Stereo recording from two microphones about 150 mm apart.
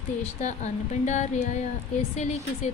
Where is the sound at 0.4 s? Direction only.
50° left (ahead or behind).